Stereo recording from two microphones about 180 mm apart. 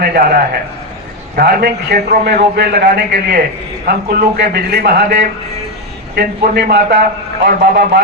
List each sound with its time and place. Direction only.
0.0 s a man's voice: 60° right (ahead or behind)